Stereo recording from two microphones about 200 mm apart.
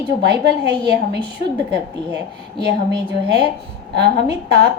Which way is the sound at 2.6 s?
55° right (ahead or behind).